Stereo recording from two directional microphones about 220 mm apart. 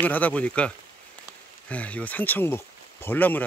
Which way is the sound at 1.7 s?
5° left (ahead or behind).